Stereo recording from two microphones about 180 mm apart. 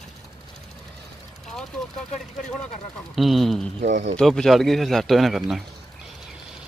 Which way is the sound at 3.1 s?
Centre (ahead or behind).